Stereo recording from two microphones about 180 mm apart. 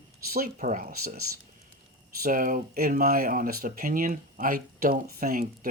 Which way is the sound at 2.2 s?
50° right (ahead or behind).